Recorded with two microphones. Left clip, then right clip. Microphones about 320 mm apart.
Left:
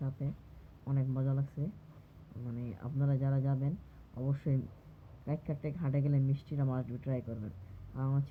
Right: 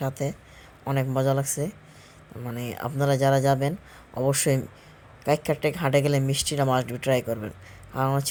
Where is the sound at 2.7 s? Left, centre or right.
Right.